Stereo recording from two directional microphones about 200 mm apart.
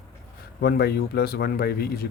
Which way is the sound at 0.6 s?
55° left (ahead or behind).